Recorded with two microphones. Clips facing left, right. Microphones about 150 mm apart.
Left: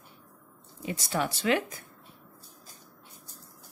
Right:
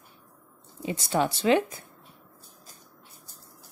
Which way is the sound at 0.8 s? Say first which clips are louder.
Right 4 dB; 25° right (ahead or behind).